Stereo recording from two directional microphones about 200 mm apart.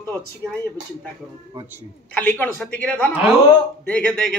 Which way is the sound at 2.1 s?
10° left (ahead or behind).